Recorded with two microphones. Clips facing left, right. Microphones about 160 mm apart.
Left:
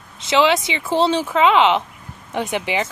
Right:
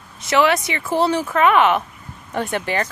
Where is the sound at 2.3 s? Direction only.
5° left (ahead or behind).